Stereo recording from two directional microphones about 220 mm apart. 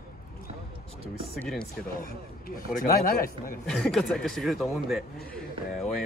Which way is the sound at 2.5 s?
40° left (ahead or behind).